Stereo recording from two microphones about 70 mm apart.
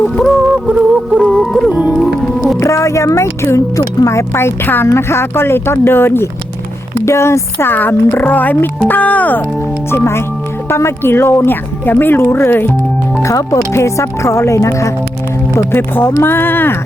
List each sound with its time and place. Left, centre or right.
0.2 s music: centre
0.4 s music: centre
1.3 s music: centre
1.7 s music: centre
2.0 s music: centre
2.6 s speech: left
9.9 s speech: left
13.2 s speech: left
15.5 s speech: left